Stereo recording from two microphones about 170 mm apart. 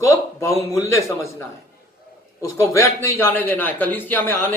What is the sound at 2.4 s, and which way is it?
A man's voice, 20° left (ahead or behind).